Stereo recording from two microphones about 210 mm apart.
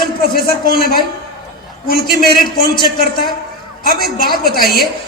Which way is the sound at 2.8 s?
45° left (ahead or behind).